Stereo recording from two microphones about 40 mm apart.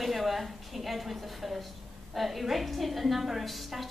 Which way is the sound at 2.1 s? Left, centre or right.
Centre.